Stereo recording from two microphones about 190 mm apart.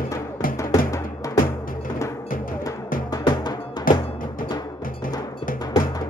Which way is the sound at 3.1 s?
20° left (ahead or behind).